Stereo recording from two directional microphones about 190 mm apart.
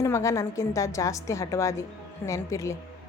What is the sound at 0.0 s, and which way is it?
A woman's voice, 15° left (ahead or behind).